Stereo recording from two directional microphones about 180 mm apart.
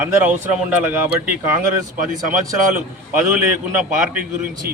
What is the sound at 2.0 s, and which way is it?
Speech, 45° right (ahead or behind).